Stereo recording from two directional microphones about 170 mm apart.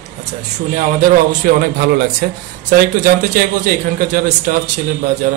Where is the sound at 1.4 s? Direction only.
65° right (ahead or behind).